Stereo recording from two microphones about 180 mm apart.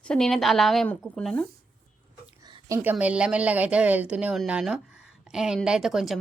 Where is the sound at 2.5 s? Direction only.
15° right (ahead or behind).